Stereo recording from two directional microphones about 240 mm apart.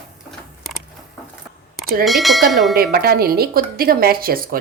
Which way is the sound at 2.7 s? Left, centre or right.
Right.